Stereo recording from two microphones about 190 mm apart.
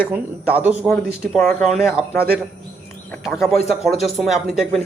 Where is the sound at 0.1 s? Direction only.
10° right (ahead or behind).